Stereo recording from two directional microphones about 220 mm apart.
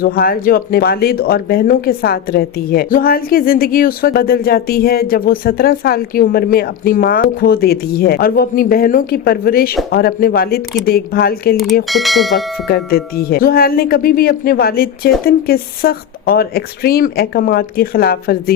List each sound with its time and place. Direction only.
0.0 s speech: 45° left (ahead or behind)
11.5 s speech: centre (ahead or behind)
12.6 s speech: 45° left (ahead or behind)